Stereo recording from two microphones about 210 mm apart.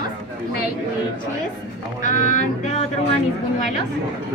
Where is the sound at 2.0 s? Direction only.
35° left (ahead or behind).